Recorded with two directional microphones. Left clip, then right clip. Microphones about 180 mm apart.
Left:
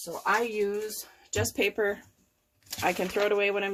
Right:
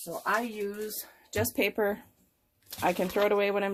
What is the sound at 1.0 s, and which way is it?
Speech, 40° right (ahead or behind).